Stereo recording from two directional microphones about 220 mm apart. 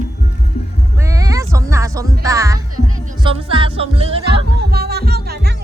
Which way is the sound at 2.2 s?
15° right (ahead or behind).